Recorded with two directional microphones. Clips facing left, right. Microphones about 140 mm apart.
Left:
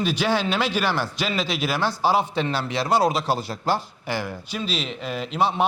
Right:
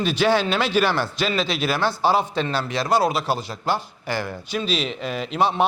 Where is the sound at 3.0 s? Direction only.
40° left (ahead or behind).